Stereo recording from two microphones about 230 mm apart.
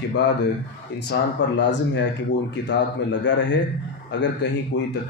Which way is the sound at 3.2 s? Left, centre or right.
Left.